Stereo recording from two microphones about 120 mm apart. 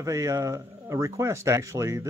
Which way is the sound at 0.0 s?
25° right (ahead or behind).